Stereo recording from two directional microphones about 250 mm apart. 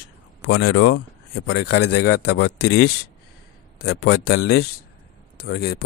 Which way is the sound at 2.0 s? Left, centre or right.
Left.